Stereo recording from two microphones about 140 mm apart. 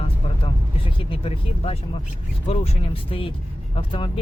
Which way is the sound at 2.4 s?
45° left (ahead or behind).